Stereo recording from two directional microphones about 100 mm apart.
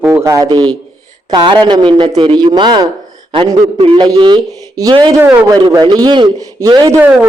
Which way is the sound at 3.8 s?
70° right (ahead or behind).